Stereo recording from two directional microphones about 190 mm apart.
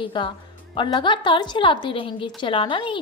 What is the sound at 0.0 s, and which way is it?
A woman's voice, 25° left (ahead or behind).